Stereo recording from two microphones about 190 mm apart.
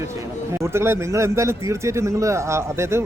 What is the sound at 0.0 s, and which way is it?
Speech, 15° right (ahead or behind).